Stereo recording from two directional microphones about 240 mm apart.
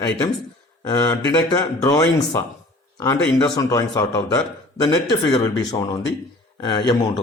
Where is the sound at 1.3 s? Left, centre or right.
Centre.